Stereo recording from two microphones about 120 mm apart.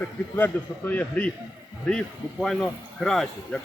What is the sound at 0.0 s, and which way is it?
A man's voice, 15° left (ahead or behind).